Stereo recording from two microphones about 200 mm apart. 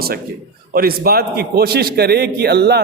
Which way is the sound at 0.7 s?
50° right (ahead or behind).